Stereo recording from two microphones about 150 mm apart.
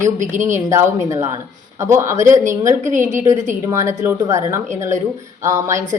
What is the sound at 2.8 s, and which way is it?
Speech, 55° right (ahead or behind).